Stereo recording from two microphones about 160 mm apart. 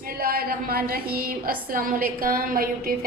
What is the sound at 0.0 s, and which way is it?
A woman's voice, 65° right (ahead or behind).